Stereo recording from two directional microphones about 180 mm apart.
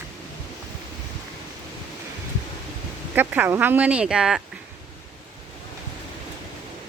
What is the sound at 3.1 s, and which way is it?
Speech, 10° right (ahead or behind).